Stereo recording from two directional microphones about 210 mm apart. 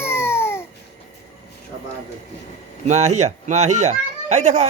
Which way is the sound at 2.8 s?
30° right (ahead or behind).